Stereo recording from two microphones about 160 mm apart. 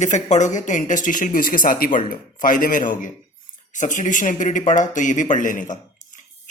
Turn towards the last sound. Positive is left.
turn(degrees=55)  # may be behind; listen again after turning